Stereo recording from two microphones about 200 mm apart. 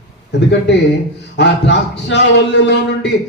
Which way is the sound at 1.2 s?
60° left (ahead or behind).